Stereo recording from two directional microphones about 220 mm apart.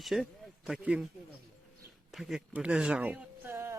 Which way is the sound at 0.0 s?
Centre (ahead or behind).